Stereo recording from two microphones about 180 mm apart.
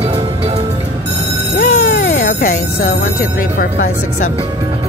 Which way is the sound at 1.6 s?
50° left (ahead or behind).